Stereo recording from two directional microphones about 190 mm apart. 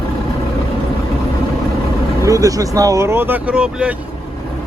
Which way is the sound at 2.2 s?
15° right (ahead or behind).